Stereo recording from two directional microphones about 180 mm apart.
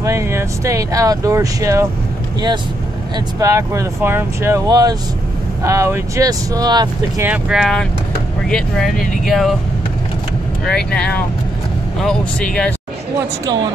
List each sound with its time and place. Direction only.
0.0 s speech: 15° right (ahead or behind)
3.3 s speech: 20° right (ahead or behind)
7.2 s speech: 5° right (ahead or behind)
10.6 s speech: 5° left (ahead or behind)